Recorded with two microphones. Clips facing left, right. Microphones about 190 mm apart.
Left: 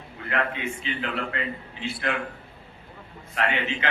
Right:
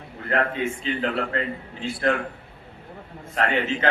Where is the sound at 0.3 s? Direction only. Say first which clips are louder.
Right 4 dB; 40° right (ahead or behind).